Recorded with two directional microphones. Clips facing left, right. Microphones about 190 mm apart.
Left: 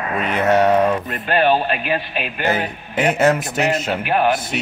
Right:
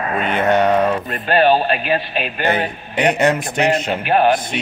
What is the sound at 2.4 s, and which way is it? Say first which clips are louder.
A man's voice: right 1 dB; centre (ahead or behind).